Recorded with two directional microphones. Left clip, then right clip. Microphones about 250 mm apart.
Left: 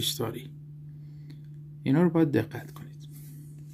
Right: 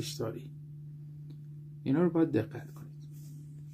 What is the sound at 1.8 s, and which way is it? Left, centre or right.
Speech, left.